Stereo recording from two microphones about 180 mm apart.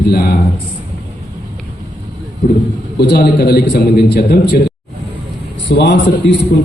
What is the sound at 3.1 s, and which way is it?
A man's voice, 60° left (ahead or behind).